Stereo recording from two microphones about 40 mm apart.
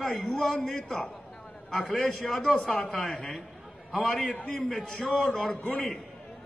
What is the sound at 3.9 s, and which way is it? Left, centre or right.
Speech, centre.